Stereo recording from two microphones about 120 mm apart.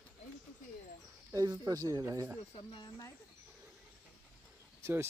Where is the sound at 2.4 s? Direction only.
45° left (ahead or behind).